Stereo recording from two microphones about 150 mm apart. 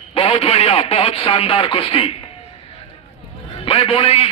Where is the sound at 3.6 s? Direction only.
40° left (ahead or behind).